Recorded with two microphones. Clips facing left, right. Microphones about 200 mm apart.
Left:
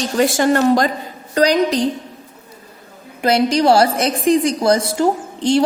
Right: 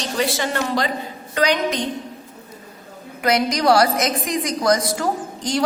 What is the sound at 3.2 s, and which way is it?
A woman's voice, 30° left (ahead or behind).